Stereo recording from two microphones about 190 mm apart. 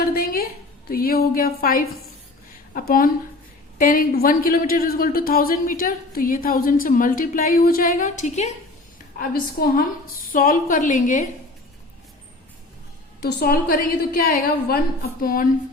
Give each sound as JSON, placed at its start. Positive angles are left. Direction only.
{"t": 0.0, "sound": "a sound", "side_deg": 50}
{"t": 0.9, "sound": "a woman's voice", "side_deg": 50}
{"t": 9.1, "sound": "a woman's voice", "side_deg": 50}
{"t": 13.2, "sound": "a woman's voice", "side_deg": 55}